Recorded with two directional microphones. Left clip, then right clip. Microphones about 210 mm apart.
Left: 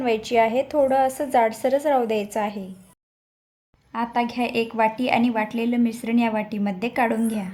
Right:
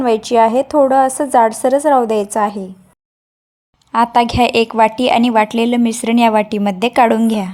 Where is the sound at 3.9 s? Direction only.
30° right (ahead or behind).